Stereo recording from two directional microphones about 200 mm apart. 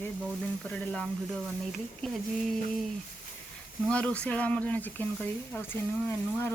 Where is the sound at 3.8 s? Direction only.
5° left (ahead or behind).